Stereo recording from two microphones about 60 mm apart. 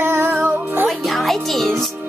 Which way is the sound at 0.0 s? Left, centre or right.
Right.